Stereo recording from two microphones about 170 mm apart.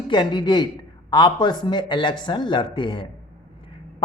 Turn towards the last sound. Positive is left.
turn(degrees=30)  # may be behind; listen again after turning